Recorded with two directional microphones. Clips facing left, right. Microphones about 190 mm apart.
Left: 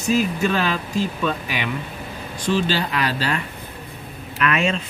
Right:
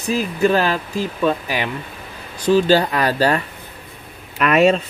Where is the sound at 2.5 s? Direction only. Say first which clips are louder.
Right 7 dB; 45° right (ahead or behind).